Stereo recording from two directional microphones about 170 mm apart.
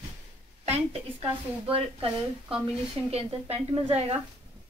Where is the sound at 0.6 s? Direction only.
40° right (ahead or behind).